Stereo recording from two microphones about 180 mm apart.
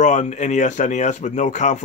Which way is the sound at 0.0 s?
40° left (ahead or behind).